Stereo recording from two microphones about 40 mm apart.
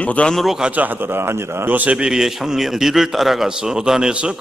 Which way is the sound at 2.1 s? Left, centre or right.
Centre.